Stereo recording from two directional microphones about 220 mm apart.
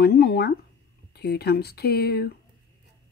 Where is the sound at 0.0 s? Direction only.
45° left (ahead or behind).